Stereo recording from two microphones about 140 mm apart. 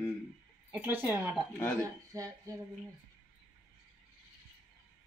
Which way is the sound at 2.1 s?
25° right (ahead or behind).